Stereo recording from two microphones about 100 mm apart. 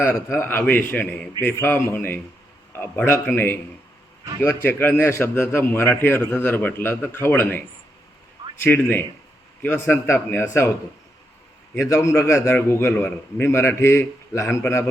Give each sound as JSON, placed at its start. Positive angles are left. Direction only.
{"t": 0.0, "sound": "a man's voice", "side_deg": 20}
{"t": 8.6, "sound": "a man's voice", "side_deg": 15}
{"t": 11.7, "sound": "a man's voice", "side_deg": 25}